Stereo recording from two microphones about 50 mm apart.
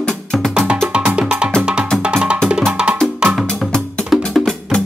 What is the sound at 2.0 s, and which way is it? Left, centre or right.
Music, right.